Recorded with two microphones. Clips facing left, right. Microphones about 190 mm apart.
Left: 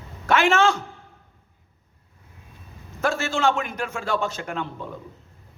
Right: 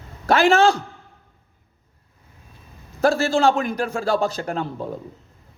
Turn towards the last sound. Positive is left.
turn(degrees=-35)  # may be behind; listen again after turning